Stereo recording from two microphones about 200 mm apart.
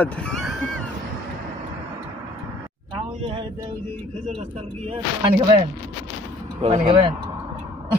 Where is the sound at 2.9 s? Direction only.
25° right (ahead or behind).